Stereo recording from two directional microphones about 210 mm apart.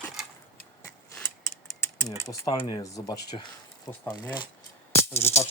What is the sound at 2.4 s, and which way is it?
Speech, 15° left (ahead or behind).